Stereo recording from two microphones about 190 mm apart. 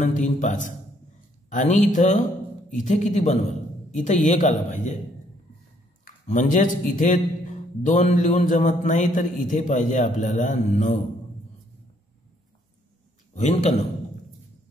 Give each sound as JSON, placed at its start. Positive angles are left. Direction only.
{"t": 0.0, "sound": "a man's voice", "side_deg": 40}
{"t": 6.0, "sound": "a man's voice", "side_deg": 40}
{"t": 13.3, "sound": "a man's voice", "side_deg": 35}